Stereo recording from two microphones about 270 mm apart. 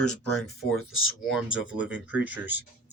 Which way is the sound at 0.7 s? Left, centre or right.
Left.